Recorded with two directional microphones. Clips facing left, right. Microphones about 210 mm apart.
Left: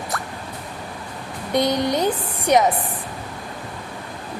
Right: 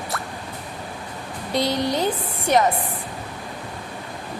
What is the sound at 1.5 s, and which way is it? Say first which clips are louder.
Speech: left 2 dB; 20° left (ahead or behind).